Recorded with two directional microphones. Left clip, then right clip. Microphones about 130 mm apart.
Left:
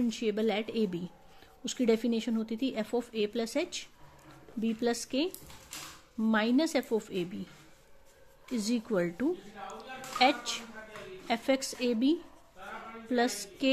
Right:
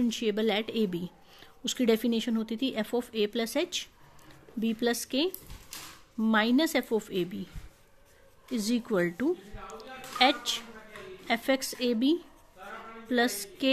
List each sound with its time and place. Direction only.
0.0 s speech: 15° right (ahead or behind)
8.5 s a woman's voice: 15° right (ahead or behind)